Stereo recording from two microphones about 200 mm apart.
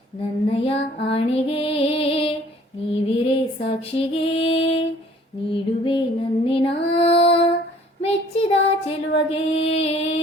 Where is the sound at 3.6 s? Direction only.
30° left (ahead or behind).